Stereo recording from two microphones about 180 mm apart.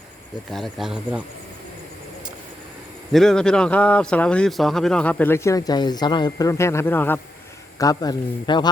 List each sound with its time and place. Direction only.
0.5 s speech: centre (ahead or behind)
3.1 s a man's voice: centre (ahead or behind); by 8.7 s 25° left (ahead or behind)